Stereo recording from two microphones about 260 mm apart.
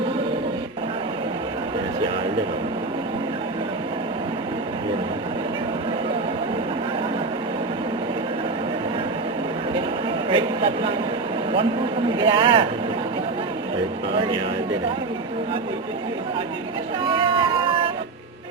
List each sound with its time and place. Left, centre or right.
10.2 s speech: centre
12.2 s speech: centre
17.1 s vehicle: centre